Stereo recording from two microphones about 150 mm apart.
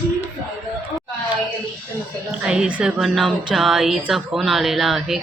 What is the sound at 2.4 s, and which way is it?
A woman's voice, 5° right (ahead or behind).